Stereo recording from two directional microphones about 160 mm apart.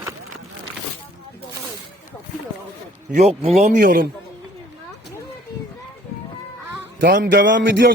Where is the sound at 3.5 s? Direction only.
50° right (ahead or behind).